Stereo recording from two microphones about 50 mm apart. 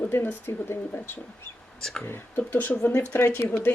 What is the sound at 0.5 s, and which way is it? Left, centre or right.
Speech, left.